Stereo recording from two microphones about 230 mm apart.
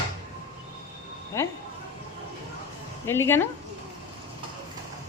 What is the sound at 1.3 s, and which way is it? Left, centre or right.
Speech, centre.